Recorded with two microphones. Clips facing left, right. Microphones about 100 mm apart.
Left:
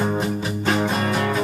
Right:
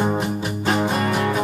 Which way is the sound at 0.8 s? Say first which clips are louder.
Right 1 dB; 15° right (ahead or behind).